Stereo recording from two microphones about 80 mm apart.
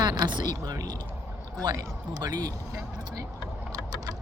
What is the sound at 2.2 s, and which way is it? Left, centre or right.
Speech, right.